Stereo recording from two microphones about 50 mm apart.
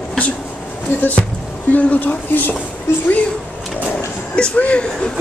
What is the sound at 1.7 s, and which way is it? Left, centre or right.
Speech, left.